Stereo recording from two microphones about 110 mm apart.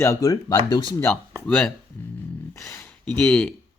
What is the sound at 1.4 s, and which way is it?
Speech, 5° left (ahead or behind).